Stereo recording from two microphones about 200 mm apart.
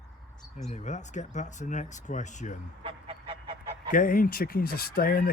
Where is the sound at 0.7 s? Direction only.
35° left (ahead or behind).